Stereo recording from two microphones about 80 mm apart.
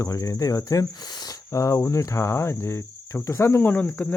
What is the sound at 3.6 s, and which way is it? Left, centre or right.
Cricket, left.